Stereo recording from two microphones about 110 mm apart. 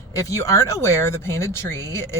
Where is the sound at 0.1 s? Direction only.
30° left (ahead or behind).